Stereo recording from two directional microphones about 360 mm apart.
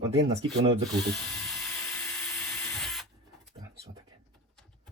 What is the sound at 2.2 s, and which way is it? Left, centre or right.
Printer, centre.